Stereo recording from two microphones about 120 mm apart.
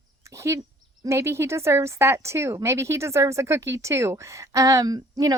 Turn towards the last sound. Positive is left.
turn(degrees=-30)  # may be behind; listen again after turning